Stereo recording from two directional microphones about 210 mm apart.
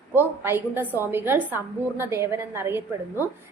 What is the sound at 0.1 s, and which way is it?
A woman's voice, 10° right (ahead or behind).